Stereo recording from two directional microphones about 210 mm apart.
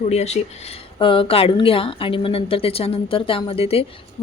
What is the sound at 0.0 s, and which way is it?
Speech, 30° left (ahead or behind).